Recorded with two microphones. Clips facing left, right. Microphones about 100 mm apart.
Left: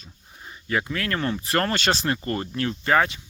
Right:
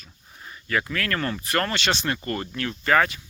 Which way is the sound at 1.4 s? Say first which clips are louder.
Left 2 dB; 30° left (ahead or behind).